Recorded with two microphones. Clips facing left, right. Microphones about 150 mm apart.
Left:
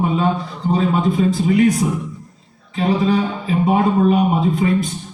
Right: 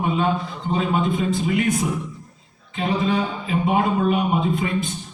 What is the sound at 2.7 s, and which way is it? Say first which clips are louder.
Speech: left 5 dB; 35° left (ahead or behind).